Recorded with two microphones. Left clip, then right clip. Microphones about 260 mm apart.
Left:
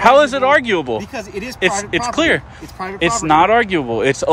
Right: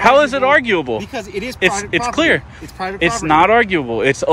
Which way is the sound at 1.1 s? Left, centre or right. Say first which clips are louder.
Right 2 dB; centre.